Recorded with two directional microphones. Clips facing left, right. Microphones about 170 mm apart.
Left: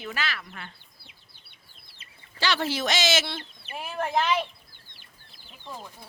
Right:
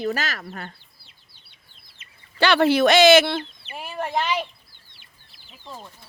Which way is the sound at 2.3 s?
60° right (ahead or behind).